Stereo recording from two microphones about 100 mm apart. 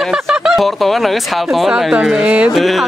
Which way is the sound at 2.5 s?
Centre (ahead or behind).